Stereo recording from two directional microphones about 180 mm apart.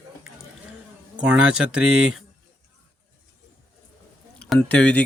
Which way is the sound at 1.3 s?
5° right (ahead or behind).